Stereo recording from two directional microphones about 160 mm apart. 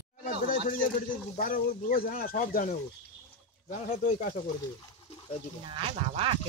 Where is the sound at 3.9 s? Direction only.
40° left (ahead or behind).